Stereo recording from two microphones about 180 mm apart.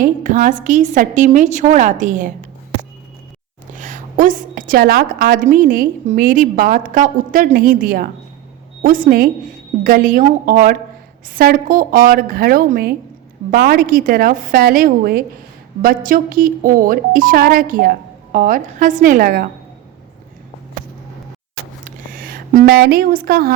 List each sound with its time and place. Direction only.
0.0 s a woman's voice: 45° right (ahead or behind)
3.8 s a woman's voice: 45° right (ahead or behind)
21.8 s a sound: 50° right (ahead or behind)